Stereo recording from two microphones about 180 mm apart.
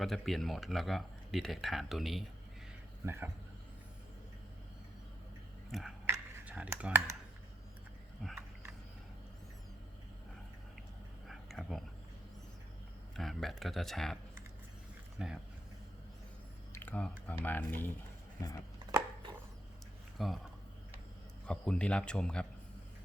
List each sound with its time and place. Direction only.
0.0 s speech: centre (ahead or behind)
5.7 s speech: centre (ahead or behind)
6.1 s computer keyboard: 10° right (ahead or behind)
8.2 s speech: 5° left (ahead or behind)
11.3 s a sound: centre (ahead or behind)
13.1 s speech: centre (ahead or behind)
15.2 s speech: 5° right (ahead or behind)
16.7 s speech: 10° left (ahead or behind)
18.9 s a sound: 20° right (ahead or behind)
20.1 s speech: centre (ahead or behind)
21.4 s speech: 5° left (ahead or behind)